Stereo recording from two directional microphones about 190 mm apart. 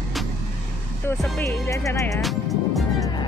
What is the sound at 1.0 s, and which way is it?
Speech, 15° left (ahead or behind).